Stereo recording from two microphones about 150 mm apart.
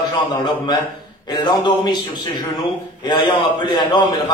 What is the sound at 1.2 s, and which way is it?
A man's voice, 30° left (ahead or behind).